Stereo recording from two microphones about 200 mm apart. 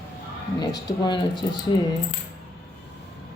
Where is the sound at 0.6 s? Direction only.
20° left (ahead or behind).